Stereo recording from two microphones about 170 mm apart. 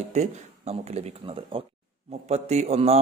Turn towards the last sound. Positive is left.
turn(degrees=-35)  # may be behind; listen again after turning